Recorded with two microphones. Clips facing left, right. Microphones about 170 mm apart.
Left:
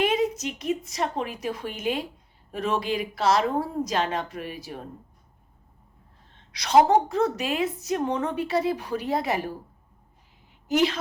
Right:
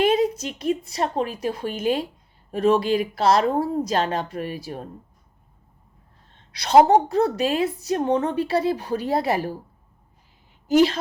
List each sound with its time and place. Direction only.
0.0 s a woman's voice: 35° right (ahead or behind)
6.5 s a woman's voice: 30° right (ahead or behind)
10.7 s a woman's voice: 35° right (ahead or behind)